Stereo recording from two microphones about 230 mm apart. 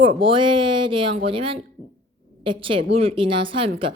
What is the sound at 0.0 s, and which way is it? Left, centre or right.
Speech, right.